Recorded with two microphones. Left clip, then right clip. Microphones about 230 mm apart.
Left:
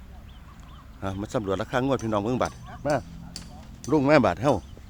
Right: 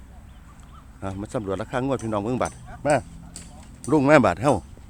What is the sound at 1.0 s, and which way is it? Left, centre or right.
Speech, centre.